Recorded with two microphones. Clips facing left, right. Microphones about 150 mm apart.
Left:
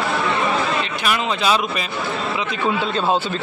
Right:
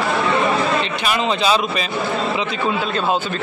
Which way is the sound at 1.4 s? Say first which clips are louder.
Right 2 dB; 10° left (ahead or behind).